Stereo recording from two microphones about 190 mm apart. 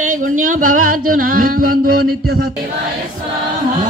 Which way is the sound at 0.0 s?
45° right (ahead or behind).